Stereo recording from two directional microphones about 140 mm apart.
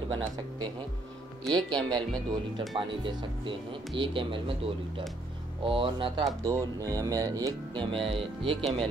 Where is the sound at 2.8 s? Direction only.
35° right (ahead or behind).